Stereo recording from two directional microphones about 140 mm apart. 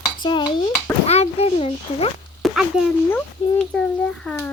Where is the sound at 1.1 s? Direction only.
45° left (ahead or behind).